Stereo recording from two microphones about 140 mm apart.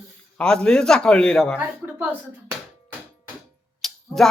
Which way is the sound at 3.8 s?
5° left (ahead or behind).